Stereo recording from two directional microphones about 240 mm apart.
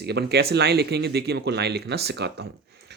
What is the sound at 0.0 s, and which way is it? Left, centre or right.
Speech, right.